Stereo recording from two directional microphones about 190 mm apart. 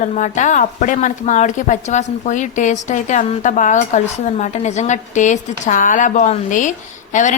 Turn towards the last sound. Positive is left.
turn(degrees=40)  # may be behind; listen again after turning